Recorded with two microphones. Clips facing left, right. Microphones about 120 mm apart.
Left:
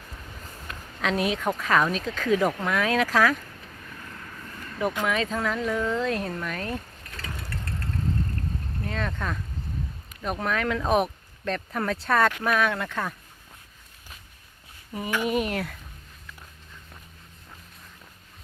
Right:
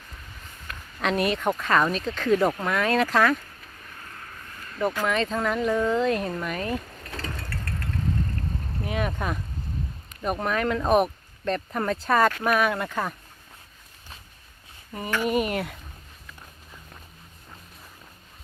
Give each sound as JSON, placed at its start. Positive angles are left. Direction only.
{"t": 1.0, "sound": "speech", "side_deg": 0}
{"t": 5.0, "sound": "speech", "side_deg": 5}
{"t": 7.3, "sound": "engine", "side_deg": 20}
{"t": 8.8, "sound": "speech", "side_deg": -15}
{"t": 14.9, "sound": "speech", "side_deg": 5}